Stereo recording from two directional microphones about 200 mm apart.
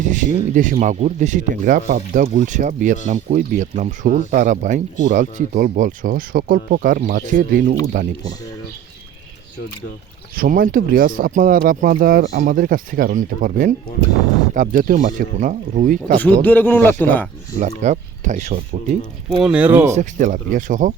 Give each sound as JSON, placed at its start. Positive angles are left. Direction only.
{"t": 0.0, "sound": "speech", "side_deg": -40}
{"t": 10.3, "sound": "speech", "side_deg": -45}
{"t": 16.1, "sound": "speech", "side_deg": 10}
{"t": 17.6, "sound": "speech", "side_deg": -35}
{"t": 19.4, "sound": "speech", "side_deg": -5}
{"t": 19.9, "sound": "speech", "side_deg": -40}